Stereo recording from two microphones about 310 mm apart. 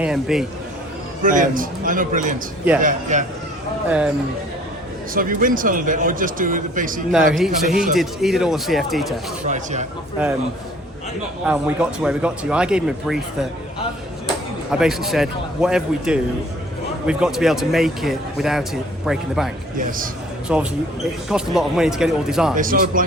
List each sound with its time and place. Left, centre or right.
0.0 s speech: centre
1.2 s speech: right
3.8 s speech: centre
5.1 s speech: right
7.3 s speech: centre
11.4 s speech: centre
14.7 s speech: centre
20.5 s speech: centre
22.5 s speech: right